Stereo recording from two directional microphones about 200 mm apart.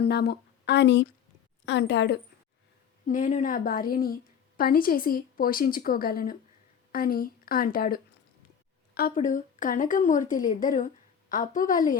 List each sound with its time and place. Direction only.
0.0 s a woman's voice: 55° left (ahead or behind)
3.1 s a woman's voice: 40° left (ahead or behind)